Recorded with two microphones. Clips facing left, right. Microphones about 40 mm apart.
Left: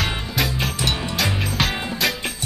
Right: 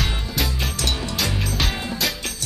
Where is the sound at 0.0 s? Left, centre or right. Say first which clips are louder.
Left 2 dB; centre.